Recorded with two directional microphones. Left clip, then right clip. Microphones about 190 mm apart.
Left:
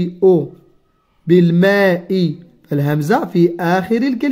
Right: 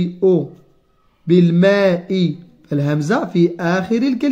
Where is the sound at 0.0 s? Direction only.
30° left (ahead or behind).